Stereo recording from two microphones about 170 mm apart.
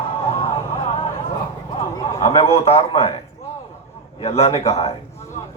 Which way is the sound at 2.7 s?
35° left (ahead or behind).